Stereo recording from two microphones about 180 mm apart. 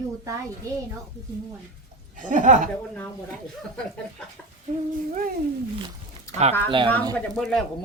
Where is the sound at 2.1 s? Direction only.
45° right (ahead or behind).